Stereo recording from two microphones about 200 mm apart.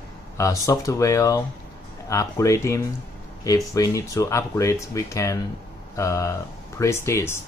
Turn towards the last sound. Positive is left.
turn(degrees=15)  # may be behind; listen again after turning